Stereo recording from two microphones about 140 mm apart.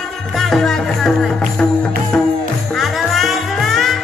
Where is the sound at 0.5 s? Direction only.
5° left (ahead or behind).